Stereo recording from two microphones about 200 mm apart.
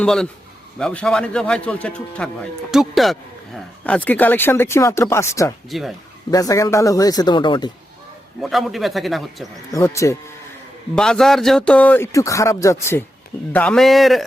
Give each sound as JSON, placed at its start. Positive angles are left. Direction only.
{"t": 0.0, "sound": "a man's voice", "side_deg": 5}
{"t": 5.6, "sound": "a man's voice", "side_deg": 0}
{"t": 6.3, "sound": "a man's voice", "side_deg": 15}
{"t": 8.4, "sound": "a man's voice", "side_deg": 0}
{"t": 9.7, "sound": "a man's voice", "side_deg": 15}
{"t": 10.9, "sound": "a man's voice", "side_deg": 5}